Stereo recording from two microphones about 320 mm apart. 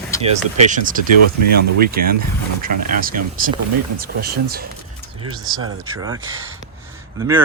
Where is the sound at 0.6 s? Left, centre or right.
Right.